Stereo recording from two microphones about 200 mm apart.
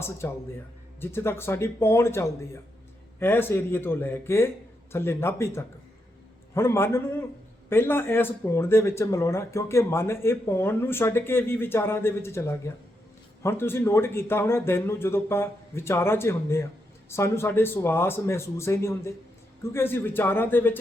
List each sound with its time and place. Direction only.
0.2 s speech: 15° left (ahead or behind)